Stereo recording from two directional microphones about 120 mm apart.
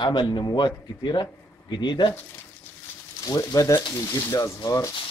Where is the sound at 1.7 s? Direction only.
40° left (ahead or behind).